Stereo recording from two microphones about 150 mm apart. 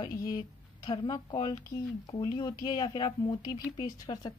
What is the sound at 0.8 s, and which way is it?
A woman's voice, 30° left (ahead or behind).